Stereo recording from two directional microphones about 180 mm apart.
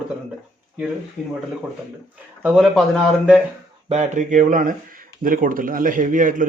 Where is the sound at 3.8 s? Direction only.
40° right (ahead or behind).